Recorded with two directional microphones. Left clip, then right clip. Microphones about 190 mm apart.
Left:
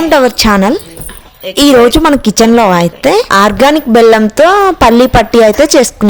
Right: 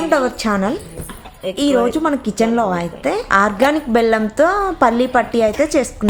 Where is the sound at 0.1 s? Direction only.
55° left (ahead or behind).